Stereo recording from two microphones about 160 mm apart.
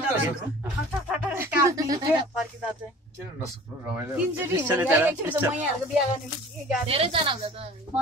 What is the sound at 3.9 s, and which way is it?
Speech, 10° right (ahead or behind).